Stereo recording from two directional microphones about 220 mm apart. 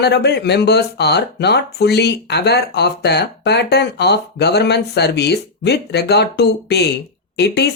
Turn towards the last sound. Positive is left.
turn(degrees=50)  # may be behind; listen again after turning